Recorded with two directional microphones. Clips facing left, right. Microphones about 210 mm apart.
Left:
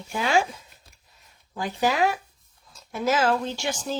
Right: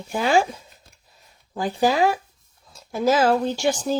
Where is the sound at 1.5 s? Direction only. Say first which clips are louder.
Right 4 dB; 35° right (ahead or behind).